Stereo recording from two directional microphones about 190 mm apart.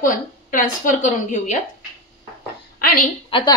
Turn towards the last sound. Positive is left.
turn(degrees=25)  # may be behind; listen again after turning